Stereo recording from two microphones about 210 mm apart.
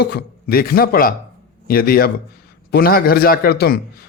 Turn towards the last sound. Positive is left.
turn(degrees=45)  # may be behind; listen again after turning